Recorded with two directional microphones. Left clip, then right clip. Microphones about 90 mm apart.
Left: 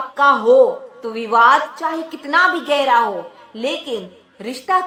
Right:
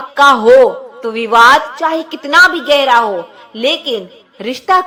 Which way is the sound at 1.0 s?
25° right (ahead or behind).